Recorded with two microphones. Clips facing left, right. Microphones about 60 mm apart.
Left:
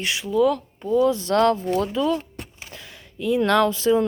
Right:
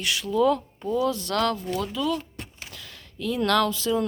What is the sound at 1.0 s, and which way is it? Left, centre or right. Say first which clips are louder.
A woman's voice: left 7 dB; left.